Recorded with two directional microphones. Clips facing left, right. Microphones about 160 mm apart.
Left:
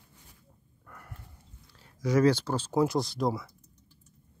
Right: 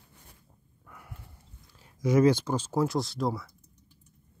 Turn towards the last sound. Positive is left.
turn(degrees=0)  # may be behind; listen again after turning